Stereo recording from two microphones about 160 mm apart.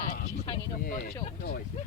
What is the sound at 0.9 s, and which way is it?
Speech, 60° left (ahead or behind).